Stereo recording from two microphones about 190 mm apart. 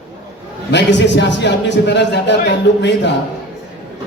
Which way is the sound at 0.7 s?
65° left (ahead or behind).